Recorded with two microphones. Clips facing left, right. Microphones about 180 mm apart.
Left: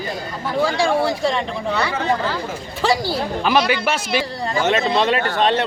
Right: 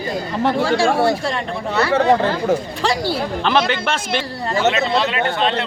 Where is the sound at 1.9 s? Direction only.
65° right (ahead or behind).